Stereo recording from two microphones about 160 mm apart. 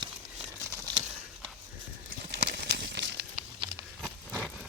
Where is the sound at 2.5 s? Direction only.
90° right.